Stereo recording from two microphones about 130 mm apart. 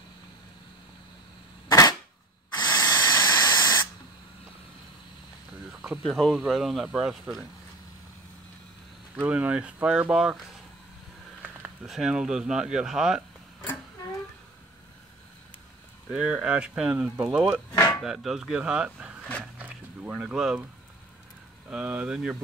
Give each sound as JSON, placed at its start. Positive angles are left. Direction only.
{"t": 1.7, "sound": "cap gun", "side_deg": 30}
{"t": 2.5, "sound": "spray", "side_deg": 35}
{"t": 5.7, "sound": "speech", "side_deg": 0}
{"t": 9.1, "sound": "speech", "side_deg": -10}
{"t": 11.8, "sound": "speech", "side_deg": -5}
{"t": 16.1, "sound": "speech", "side_deg": -10}
{"t": 17.7, "sound": "chopping", "side_deg": 25}
{"t": 18.0, "sound": "speech", "side_deg": -5}
{"t": 21.6, "sound": "speech", "side_deg": -10}